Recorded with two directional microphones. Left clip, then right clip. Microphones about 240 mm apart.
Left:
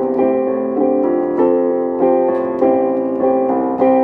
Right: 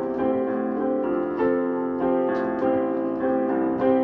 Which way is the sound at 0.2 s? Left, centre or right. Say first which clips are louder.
Left 7 dB; centre.